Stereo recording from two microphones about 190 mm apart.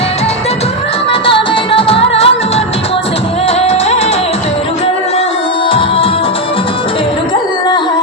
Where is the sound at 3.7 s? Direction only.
35° left (ahead or behind).